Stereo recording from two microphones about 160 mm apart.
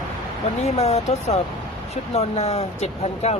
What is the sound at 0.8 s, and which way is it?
Speech, 40° left (ahead or behind).